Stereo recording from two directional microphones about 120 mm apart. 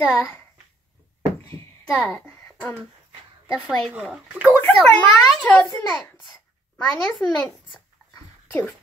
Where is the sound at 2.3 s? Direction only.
15° left (ahead or behind).